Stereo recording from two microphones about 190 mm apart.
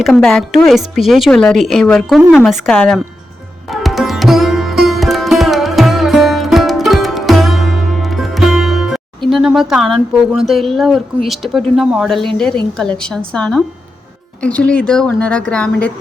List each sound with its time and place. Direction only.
0.0 s speech: centre (ahead or behind)
3.7 s sitar: centre (ahead or behind)
12.7 s speech: 5° left (ahead or behind)